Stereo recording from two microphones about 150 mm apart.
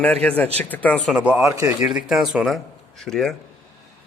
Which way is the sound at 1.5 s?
20° right (ahead or behind).